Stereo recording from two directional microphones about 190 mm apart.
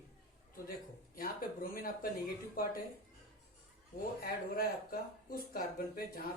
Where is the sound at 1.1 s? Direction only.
50° left (ahead or behind).